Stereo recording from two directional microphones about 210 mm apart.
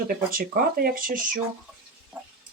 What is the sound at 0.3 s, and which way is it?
Speech, 45° right (ahead or behind).